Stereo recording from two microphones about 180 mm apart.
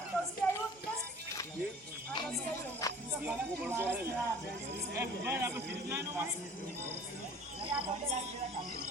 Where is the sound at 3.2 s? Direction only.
10° right (ahead or behind).